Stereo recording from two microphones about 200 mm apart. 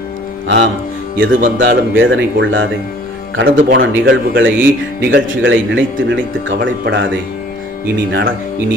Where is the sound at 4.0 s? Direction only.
70° right (ahead or behind).